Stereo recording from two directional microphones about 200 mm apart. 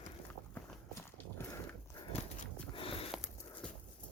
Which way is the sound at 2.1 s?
30° left (ahead or behind).